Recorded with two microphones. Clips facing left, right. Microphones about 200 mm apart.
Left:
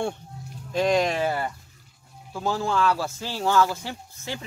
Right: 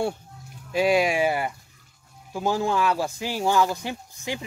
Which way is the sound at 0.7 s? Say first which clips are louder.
Right 1 dB; 10° right (ahead or behind).